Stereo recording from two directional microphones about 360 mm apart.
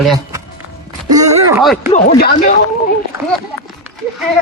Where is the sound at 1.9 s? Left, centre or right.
Left.